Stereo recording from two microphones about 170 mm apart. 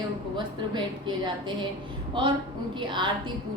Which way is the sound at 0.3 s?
25° right (ahead or behind).